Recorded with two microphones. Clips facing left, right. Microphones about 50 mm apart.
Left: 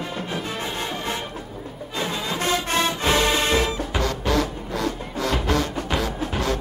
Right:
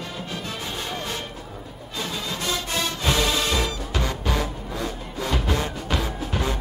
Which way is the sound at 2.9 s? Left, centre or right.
Left.